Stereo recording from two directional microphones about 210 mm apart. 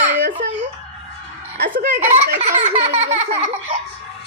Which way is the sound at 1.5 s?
40° right (ahead or behind).